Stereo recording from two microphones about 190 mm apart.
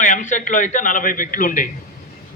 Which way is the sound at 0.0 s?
40° left (ahead or behind).